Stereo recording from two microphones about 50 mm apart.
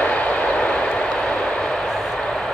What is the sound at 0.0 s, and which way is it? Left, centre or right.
Vehicle, left.